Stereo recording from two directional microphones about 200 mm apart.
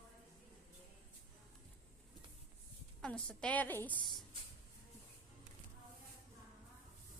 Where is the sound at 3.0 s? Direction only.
5° left (ahead or behind).